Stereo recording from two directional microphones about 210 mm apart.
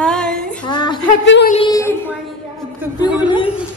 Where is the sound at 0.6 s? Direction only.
20° left (ahead or behind).